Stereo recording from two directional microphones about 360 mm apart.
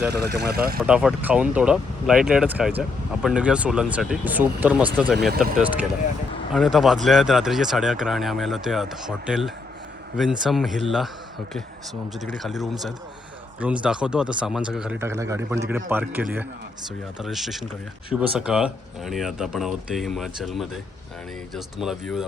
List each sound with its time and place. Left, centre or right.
0.3 s speech: right
0.8 s speech: centre
12.4 s speech: centre